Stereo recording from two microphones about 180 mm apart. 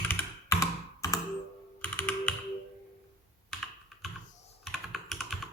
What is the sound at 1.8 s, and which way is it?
Computer keyboard, 10° left (ahead or behind).